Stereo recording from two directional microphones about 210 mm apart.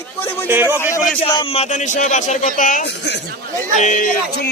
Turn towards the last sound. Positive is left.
turn(degrees=40)  # may be behind; listen again after turning